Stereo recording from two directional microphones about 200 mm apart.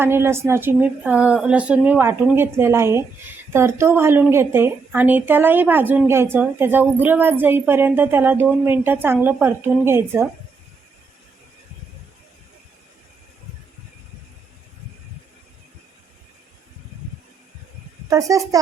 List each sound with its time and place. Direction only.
0.0 s a woman's voice: 10° right (ahead or behind)
18.1 s a woman's voice: 15° right (ahead or behind)